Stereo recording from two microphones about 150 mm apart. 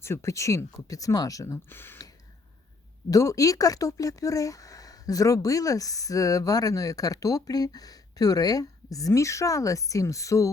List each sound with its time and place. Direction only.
0.0 s speech: 20° left (ahead or behind)
3.1 s speech: 20° left (ahead or behind)